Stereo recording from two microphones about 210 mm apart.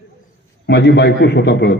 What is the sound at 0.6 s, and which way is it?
A man's voice, 50° left (ahead or behind).